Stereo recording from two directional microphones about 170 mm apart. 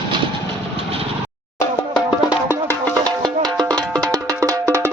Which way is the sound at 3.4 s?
25° right (ahead or behind).